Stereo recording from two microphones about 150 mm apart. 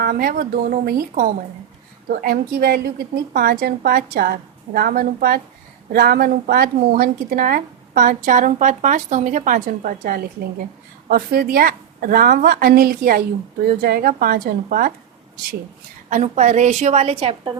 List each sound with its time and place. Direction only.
0.0 s a woman's voice: 80° right
5.9 s a woman's voice: 90° right
11.1 s a woman's voice: 90° right; by 14.9 s 70° right (ahead or behind)
16.0 s a woman's voice: 50° right (ahead or behind)